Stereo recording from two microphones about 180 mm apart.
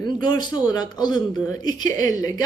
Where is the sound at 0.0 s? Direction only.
25° left (ahead or behind).